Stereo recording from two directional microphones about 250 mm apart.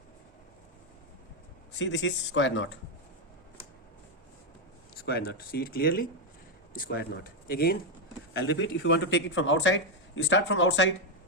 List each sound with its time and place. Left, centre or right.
1.8 s speech: left
5.0 s speech: left